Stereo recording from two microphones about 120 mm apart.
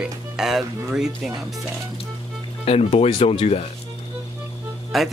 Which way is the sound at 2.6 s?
55° left (ahead or behind).